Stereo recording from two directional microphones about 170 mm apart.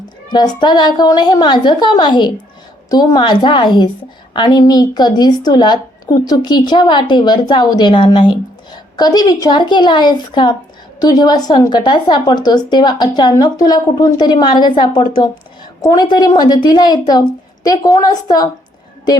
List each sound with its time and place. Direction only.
0.3 s a woman's voice: 25° left (ahead or behind)